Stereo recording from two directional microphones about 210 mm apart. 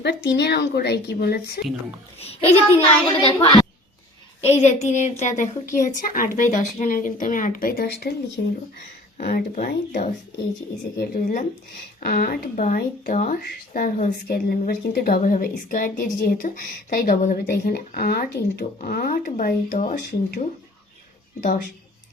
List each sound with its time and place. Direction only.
0.0 s speech: 55° left (ahead or behind)
2.1 s a child's voice: 30° left (ahead or behind); by 8.1 s 50° left (ahead or behind)
9.1 s a woman's voice: 40° left (ahead or behind)
21.4 s speech: 45° left (ahead or behind)